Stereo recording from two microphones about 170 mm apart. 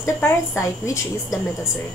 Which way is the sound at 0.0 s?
15° left (ahead or behind).